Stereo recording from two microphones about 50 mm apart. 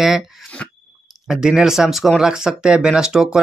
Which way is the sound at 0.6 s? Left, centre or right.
Left.